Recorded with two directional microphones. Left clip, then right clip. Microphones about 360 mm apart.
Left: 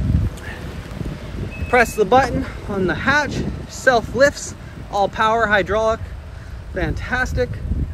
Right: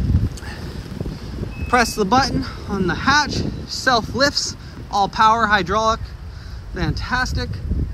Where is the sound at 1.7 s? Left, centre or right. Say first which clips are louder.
Left 2 dB; centre.